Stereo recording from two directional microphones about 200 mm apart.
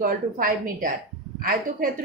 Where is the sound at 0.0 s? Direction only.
45° right (ahead or behind).